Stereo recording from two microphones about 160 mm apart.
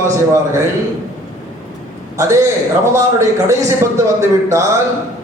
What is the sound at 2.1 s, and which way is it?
A man's voice, 20° right (ahead or behind).